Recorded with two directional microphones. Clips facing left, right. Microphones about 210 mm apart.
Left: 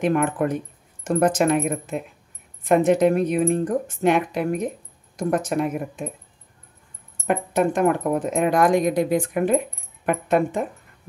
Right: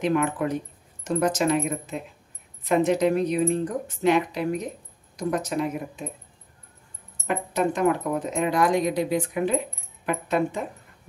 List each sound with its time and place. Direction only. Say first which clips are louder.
0.0 s speech: left 3 dB; 50° left (ahead or behind)
7.2 s speech: left 4 dB; 50° left (ahead or behind)